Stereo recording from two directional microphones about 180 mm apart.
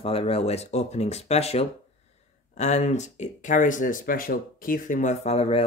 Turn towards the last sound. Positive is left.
turn(degrees=35)  # may be behind; listen again after turning